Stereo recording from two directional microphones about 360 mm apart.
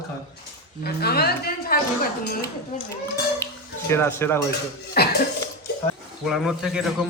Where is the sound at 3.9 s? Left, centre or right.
Centre.